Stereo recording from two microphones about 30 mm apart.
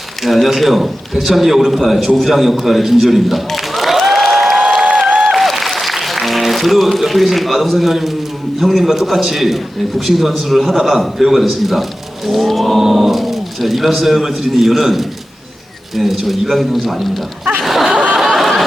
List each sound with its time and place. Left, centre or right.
0.3 s a man's voice: centre
2.8 s applause: centre
8.5 s a man's voice: centre
17.6 s snicker: centre
17.9 s a sound: right
18.3 s a sound: centre